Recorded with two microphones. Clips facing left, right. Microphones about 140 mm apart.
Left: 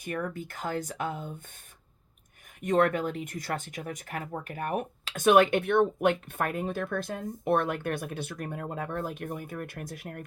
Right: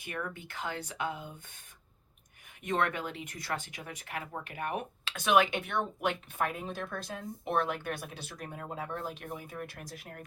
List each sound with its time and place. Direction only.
0.0 s speech: 40° left (ahead or behind)
2.6 s speech: 45° left (ahead or behind)